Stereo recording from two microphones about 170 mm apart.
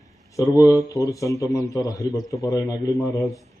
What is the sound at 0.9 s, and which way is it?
A man's voice, 20° left (ahead or behind).